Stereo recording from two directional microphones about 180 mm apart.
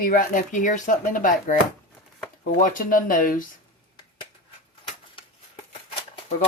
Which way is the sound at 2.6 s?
50° left (ahead or behind).